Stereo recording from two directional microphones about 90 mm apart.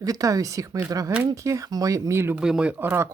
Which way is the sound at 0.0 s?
40° right (ahead or behind).